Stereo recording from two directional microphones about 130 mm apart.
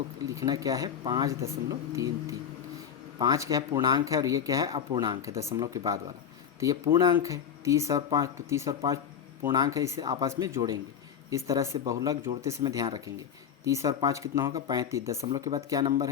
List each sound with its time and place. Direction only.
0.3 s speech: 25° right (ahead or behind)